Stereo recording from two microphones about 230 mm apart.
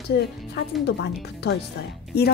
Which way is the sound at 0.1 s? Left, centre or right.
Left.